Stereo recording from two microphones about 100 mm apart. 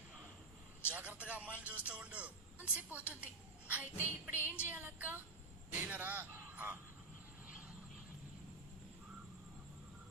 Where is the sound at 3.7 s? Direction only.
15° right (ahead or behind).